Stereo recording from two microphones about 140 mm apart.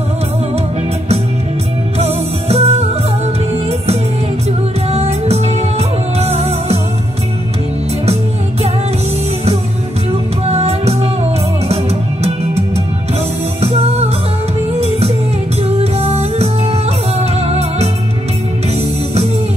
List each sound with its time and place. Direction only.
2.0 s music: 50° right (ahead or behind)
4.9 s music: 50° right (ahead or behind)
10.5 s music: 50° right (ahead or behind)
13.6 s music: 45° right (ahead or behind)